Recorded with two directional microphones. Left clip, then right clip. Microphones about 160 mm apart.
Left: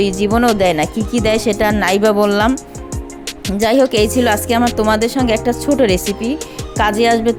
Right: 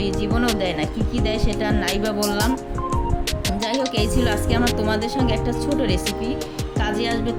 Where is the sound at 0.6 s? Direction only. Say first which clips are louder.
Left 9 dB; 55° left (ahead or behind).